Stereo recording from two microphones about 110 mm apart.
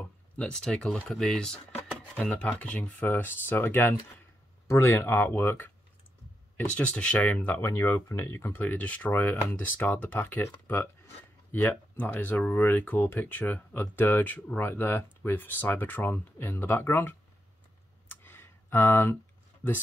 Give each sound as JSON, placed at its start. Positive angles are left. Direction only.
{"t": 0.4, "sound": "speech", "side_deg": 10}
{"t": 7.6, "sound": "speech", "side_deg": 25}
{"t": 18.2, "sound": "a sound", "side_deg": 20}